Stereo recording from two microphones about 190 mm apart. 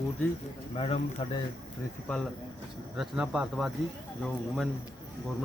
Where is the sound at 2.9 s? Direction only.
5° right (ahead or behind).